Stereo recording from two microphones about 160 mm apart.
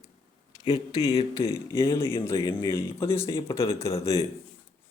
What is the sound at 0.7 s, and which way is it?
A man's voice, 25° left (ahead or behind).